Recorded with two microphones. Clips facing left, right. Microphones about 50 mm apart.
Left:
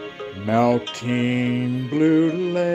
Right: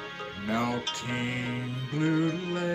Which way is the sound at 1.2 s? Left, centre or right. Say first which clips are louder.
Left 15 dB; left.